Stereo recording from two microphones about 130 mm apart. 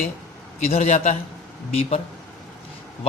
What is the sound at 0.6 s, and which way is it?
Speech, 55° left (ahead or behind).